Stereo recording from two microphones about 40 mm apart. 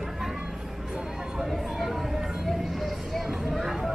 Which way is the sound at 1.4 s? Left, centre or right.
Centre.